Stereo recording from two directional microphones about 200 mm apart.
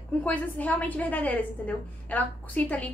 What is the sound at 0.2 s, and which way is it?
A woman's voice, 10° left (ahead or behind).